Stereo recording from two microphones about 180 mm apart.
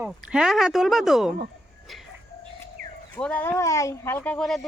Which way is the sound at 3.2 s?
10° left (ahead or behind).